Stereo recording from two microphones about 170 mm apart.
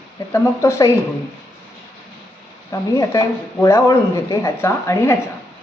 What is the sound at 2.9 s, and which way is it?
Speech, 20° left (ahead or behind).